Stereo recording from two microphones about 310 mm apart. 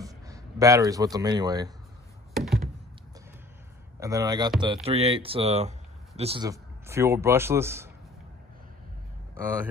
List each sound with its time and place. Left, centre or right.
0.0 s speech: centre
2.3 s tap: centre
4.0 s speech: centre